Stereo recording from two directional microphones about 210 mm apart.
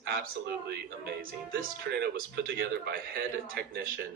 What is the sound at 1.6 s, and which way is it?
A man's voice, 45° right (ahead or behind).